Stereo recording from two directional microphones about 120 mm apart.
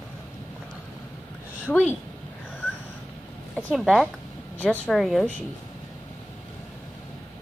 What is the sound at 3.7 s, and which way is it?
Speech, centre (ahead or behind).